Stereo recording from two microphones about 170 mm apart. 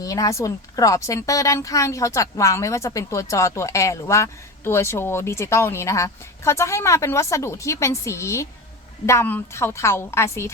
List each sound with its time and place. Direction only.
0.0 s speech: 20° left (ahead or behind)